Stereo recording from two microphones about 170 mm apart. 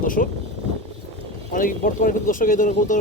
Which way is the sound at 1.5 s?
55° left (ahead or behind).